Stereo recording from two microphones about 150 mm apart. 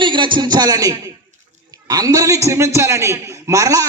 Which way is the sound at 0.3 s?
25° right (ahead or behind).